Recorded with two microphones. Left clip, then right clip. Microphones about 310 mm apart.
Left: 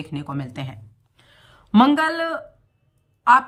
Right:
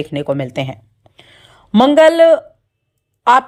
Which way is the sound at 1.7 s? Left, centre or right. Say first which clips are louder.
Right 9 dB; centre.